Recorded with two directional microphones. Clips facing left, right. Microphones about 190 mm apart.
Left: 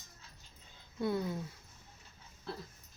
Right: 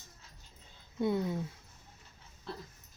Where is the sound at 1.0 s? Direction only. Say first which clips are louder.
Right 3 dB; 20° right (ahead or behind).